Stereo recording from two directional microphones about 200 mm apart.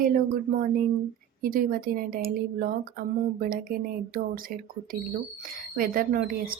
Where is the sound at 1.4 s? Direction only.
45° right (ahead or behind).